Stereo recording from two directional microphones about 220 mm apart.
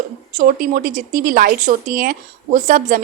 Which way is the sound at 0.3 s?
35° right (ahead or behind).